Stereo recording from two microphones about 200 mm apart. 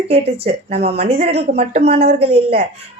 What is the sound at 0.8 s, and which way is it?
Speech, 30° right (ahead or behind).